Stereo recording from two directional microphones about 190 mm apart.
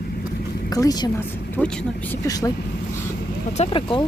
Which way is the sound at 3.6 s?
30° left (ahead or behind).